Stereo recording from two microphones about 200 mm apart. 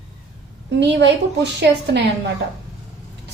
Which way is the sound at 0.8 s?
60° right (ahead or behind).